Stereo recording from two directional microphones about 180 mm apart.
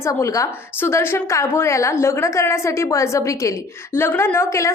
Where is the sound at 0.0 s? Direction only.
15° left (ahead or behind).